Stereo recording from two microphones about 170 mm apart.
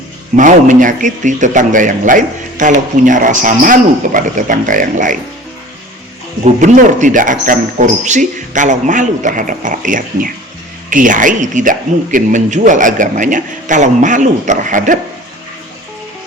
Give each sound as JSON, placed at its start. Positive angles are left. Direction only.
{"t": 0.3, "sound": "a man's voice", "side_deg": -50}
{"t": 6.4, "sound": "a man's voice", "side_deg": -45}